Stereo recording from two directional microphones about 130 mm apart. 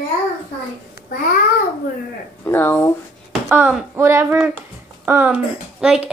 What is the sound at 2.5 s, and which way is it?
Speech, 15° left (ahead or behind).